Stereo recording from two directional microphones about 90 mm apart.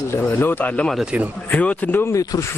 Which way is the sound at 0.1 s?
25° left (ahead or behind).